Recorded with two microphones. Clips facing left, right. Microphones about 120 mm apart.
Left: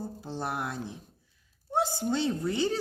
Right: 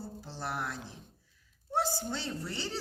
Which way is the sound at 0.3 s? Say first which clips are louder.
Left 4 dB; 20° left (ahead or behind).